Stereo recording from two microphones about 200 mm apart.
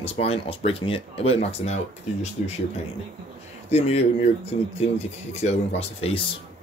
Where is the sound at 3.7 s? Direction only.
35° left (ahead or behind).